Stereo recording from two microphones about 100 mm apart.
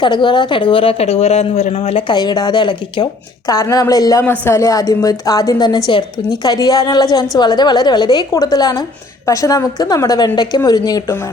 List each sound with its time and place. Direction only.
0.0 s a woman's voice: 55° left (ahead or behind); by 2.0 s 85° left
2.0 s a woman's voice: 45° left (ahead or behind)
4.2 s a woman's voice: 25° left (ahead or behind); by 11.0 s 40° left (ahead or behind)